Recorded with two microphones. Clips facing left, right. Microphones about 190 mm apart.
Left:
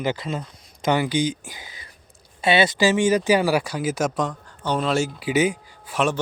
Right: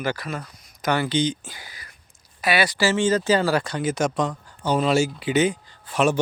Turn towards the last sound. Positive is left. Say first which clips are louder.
# right 1 dB
turn(degrees=10)  # may be behind; listen again after turning